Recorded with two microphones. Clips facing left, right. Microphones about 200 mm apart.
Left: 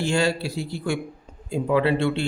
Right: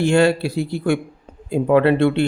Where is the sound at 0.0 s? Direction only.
60° right (ahead or behind).